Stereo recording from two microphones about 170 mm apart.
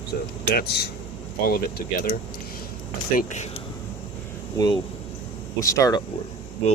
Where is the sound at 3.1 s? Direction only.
45° left (ahead or behind).